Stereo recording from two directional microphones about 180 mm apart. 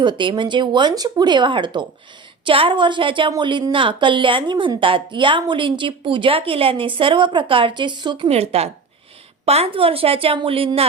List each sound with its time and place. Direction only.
0.0 s a woman's voice: 25° right (ahead or behind)